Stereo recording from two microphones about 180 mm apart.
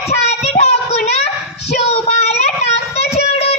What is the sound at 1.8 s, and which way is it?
Child singing, 35° left (ahead or behind).